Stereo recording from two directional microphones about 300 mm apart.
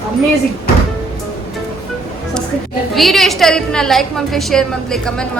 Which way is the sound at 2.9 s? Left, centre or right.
Centre.